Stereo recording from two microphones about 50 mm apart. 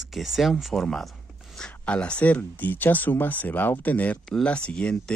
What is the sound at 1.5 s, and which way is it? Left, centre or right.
Speech, left.